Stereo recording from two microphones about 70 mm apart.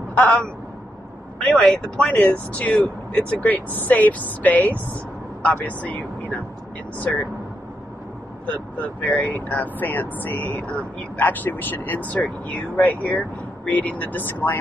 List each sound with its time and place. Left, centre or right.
0.2 s speech: centre
1.5 s speech: centre
8.5 s speech: left